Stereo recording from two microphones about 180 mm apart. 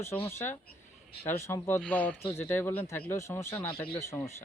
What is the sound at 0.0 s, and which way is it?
Speech, 15° left (ahead or behind).